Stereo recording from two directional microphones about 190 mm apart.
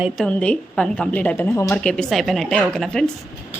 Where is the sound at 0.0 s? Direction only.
5° left (ahead or behind).